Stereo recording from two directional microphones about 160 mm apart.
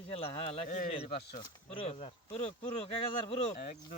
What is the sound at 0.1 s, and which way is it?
Speech, 35° left (ahead or behind).